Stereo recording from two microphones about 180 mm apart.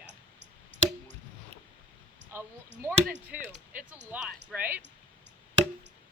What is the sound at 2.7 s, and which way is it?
Speech, 85° right.